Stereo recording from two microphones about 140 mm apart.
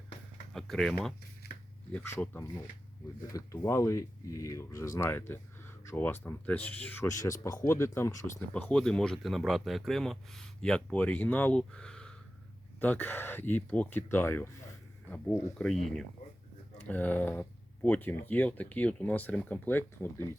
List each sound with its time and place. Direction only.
0.5 s speech: 5° left (ahead or behind)
1.9 s speech: 15° left (ahead or behind)
15.5 s speech: 5° left (ahead or behind)